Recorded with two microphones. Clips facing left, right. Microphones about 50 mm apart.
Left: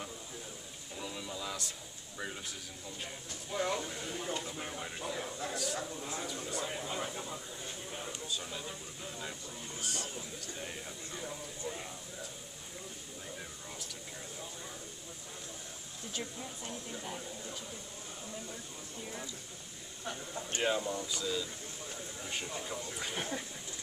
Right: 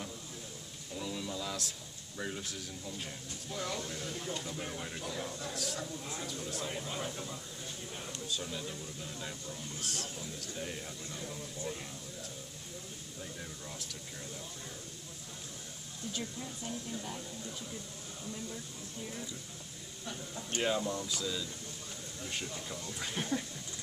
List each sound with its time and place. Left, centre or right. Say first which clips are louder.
0.9 s a sound: right 3 dB; centre
3.5 s speech: left 4 dB; centre
16.1 s speech: right 1 dB; centre
20.6 s speech: even; centre
22.9 s speech: right 4 dB; centre